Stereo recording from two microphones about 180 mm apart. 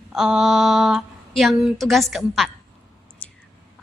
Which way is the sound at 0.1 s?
5° right (ahead or behind).